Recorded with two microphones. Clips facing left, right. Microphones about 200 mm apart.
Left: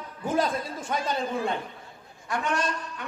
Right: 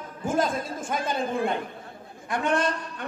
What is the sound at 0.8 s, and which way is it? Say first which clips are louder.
A man's voice: even; 50° right (ahead or behind).